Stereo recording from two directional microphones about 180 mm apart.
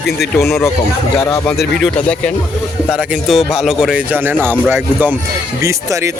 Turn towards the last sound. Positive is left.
turn(degrees=-15)  # may be behind; listen again after turning